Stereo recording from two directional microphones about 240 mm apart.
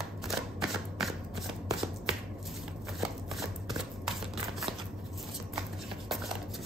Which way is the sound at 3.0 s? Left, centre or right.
Centre.